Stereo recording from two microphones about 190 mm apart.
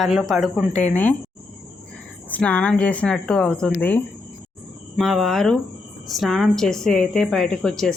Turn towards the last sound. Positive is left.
turn(degrees=5)  # may be behind; listen again after turning